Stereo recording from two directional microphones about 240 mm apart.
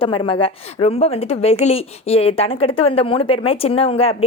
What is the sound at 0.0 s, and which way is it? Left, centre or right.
Speech, left.